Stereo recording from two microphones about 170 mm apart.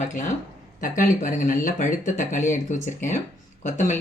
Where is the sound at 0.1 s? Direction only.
45° left (ahead or behind).